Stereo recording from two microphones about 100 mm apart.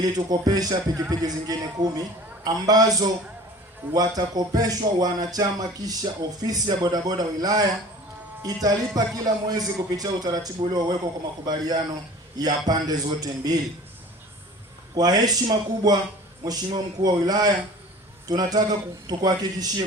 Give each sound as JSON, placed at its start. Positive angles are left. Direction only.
{"t": 0.0, "sound": "music", "side_deg": -40}
{"t": 8.4, "sound": "speech", "side_deg": -40}
{"t": 9.0, "sound": "music", "side_deg": -40}
{"t": 11.4, "sound": "a man's voice", "side_deg": -40}
{"t": 12.4, "sound": "music", "side_deg": -40}
{"t": 14.9, "sound": "music", "side_deg": -40}